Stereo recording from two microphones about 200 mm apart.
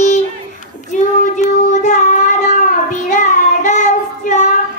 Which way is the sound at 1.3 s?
35° left (ahead or behind).